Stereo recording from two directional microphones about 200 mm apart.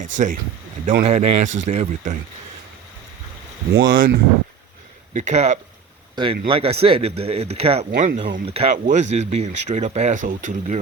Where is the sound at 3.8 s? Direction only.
45° right (ahead or behind).